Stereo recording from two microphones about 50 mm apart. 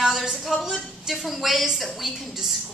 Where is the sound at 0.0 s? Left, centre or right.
Centre.